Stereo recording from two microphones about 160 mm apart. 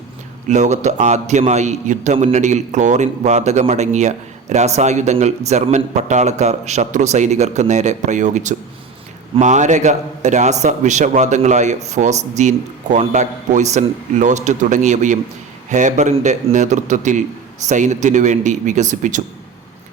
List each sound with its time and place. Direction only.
0.4 s a man's voice: 45° right (ahead or behind)